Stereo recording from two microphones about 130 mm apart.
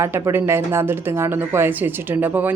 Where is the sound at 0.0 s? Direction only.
20° right (ahead or behind).